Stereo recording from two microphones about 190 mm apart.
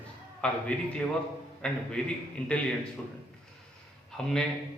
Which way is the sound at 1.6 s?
5° left (ahead or behind).